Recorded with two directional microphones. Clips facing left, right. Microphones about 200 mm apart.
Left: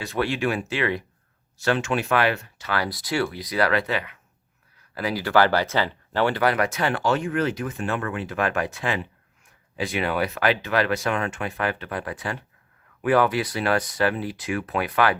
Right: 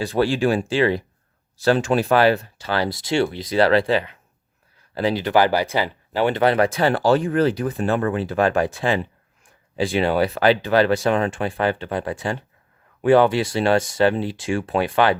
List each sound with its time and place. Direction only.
0.0 s speech: 30° right (ahead or behind)